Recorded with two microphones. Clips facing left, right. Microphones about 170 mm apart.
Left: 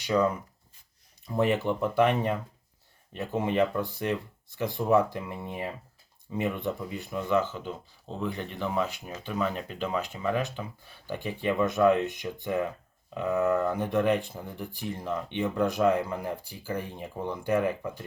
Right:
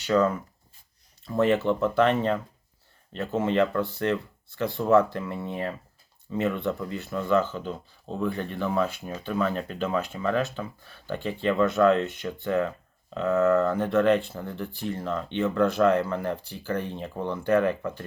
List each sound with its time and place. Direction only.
0.0 s speech: 15° left (ahead or behind)